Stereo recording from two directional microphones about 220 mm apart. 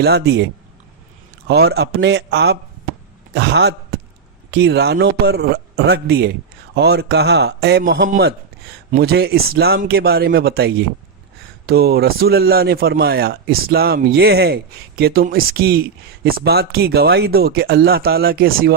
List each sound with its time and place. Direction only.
0.0 s speech: 50° right (ahead or behind)
1.5 s a man's voice: 50° right (ahead or behind)